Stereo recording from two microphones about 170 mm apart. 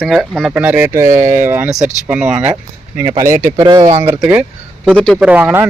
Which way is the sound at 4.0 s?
10° right (ahead or behind).